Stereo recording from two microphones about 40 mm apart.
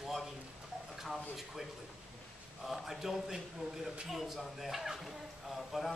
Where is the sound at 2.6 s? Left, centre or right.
Centre.